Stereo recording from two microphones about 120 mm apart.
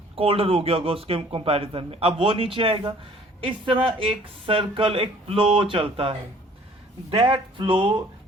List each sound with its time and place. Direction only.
0.2 s speech: 50° right (ahead or behind)